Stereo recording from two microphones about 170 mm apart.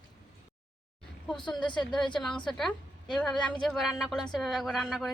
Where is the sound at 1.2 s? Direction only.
25° left (ahead or behind).